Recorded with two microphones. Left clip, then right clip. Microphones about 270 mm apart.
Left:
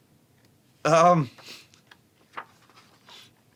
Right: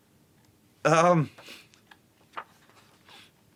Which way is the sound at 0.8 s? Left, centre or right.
Right.